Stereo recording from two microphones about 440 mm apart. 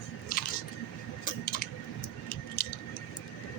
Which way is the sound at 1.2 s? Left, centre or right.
Centre.